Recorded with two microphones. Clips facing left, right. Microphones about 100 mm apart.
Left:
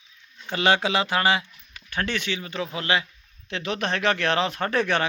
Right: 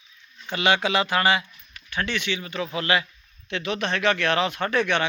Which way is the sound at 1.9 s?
45° left (ahead or behind).